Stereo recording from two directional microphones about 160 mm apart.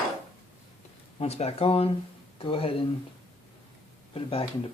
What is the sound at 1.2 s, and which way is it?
Speech, 40° left (ahead or behind).